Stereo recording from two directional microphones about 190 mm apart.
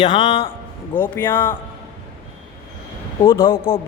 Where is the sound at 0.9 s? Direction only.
10° left (ahead or behind).